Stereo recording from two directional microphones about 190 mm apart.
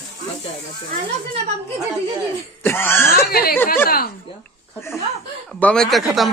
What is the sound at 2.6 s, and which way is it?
Speech, 10° left (ahead or behind).